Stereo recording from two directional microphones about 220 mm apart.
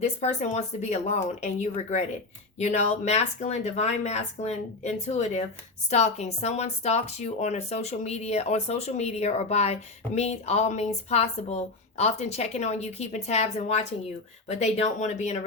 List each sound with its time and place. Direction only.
0.0 s speech: 30° left (ahead or behind)